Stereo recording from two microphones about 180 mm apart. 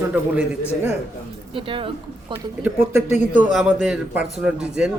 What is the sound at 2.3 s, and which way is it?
A man's voice, 10° right (ahead or behind).